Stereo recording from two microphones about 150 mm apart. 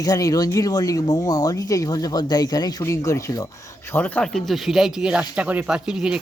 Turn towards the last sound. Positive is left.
turn(degrees=-5)  # may be behind; listen again after turning